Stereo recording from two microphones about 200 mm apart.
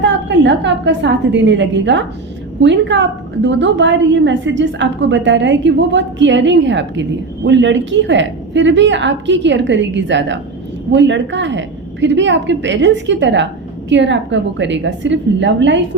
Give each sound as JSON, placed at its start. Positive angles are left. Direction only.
{"t": 0.0, "sound": "a woman's voice", "side_deg": -65}